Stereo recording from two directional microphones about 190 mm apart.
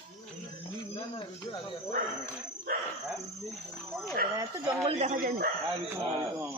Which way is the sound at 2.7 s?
50° right (ahead or behind).